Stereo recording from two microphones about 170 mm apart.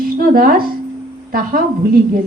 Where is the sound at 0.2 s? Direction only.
60° right (ahead or behind).